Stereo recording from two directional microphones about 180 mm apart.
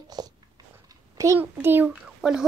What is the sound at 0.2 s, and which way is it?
Biting, 20° right (ahead or behind).